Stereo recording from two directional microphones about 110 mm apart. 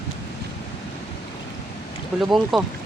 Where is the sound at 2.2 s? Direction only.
Centre (ahead or behind).